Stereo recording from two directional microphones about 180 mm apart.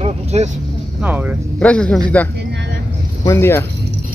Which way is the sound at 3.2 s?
15° left (ahead or behind).